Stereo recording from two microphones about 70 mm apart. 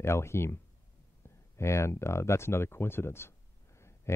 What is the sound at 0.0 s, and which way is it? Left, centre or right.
Speech, left.